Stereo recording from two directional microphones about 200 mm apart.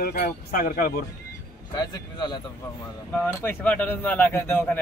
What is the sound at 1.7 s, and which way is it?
Speech, 20° left (ahead or behind).